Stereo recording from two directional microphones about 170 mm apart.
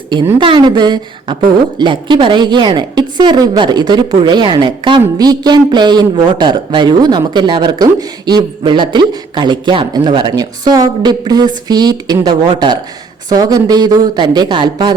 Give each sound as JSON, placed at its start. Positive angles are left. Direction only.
{"t": 0.3, "sound": "a woman's voice", "side_deg": -25}